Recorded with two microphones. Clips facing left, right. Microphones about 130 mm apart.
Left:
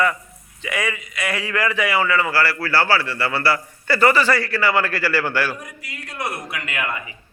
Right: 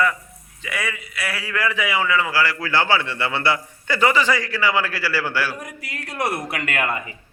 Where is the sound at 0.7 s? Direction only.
15° left (ahead or behind).